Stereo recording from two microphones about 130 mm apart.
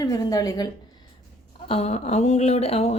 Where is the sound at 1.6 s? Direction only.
50° left (ahead or behind).